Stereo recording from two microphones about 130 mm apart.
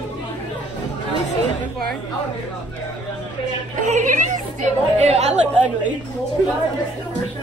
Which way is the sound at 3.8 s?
70° right (ahead or behind).